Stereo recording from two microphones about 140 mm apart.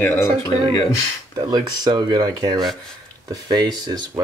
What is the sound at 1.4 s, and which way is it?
Speech, 35° right (ahead or behind).